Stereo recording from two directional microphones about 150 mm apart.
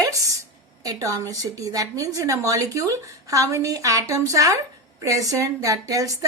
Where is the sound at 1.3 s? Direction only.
25° right (ahead or behind).